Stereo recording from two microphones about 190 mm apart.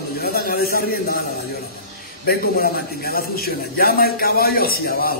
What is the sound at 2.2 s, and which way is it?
A man's voice, 50° left (ahead or behind).